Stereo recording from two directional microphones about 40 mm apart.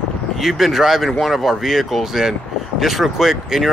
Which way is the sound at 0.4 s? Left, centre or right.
Centre.